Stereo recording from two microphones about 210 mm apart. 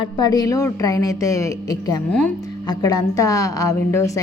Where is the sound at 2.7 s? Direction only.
20° left (ahead or behind).